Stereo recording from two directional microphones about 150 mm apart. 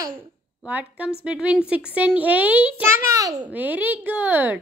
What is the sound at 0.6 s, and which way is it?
Speech, 10° right (ahead or behind).